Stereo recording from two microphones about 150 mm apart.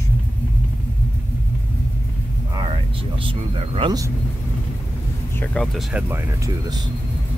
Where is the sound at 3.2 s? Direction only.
35° right (ahead or behind).